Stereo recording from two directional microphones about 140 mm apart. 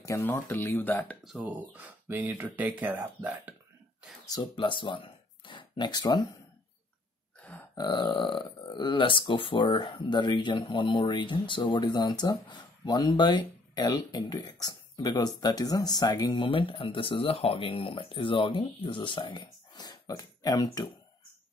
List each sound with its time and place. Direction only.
0.0 s speech: 20° left (ahead or behind)
1.2 s speech: 5° right (ahead or behind)
4.3 s speech: 35° left (ahead or behind)
7.7 s speech: 35° left (ahead or behind)